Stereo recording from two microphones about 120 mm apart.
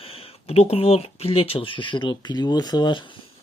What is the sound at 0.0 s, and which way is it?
Speech, 50° left (ahead or behind).